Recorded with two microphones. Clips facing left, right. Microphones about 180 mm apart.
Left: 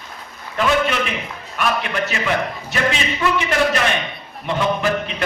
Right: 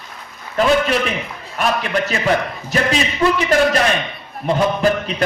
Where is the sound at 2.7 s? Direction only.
35° right (ahead or behind).